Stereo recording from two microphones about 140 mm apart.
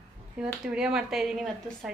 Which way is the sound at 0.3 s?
5° right (ahead or behind).